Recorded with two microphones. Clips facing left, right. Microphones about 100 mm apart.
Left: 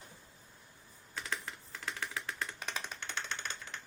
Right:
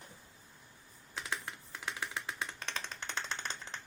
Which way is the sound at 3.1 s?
30° right (ahead or behind).